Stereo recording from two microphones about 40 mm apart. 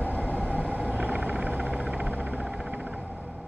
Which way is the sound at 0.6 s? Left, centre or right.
Right.